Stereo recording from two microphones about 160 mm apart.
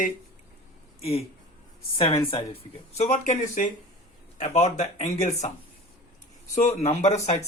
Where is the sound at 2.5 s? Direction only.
40° left (ahead or behind).